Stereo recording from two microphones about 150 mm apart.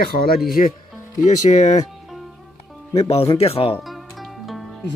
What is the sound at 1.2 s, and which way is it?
Speech, 50° left (ahead or behind).